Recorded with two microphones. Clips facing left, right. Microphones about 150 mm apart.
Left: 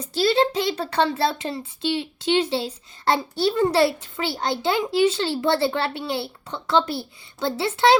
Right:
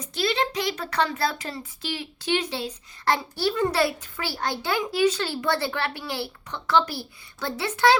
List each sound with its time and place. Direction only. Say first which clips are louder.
0.0 s a child's voice: left 6 dB; 30° left (ahead or behind)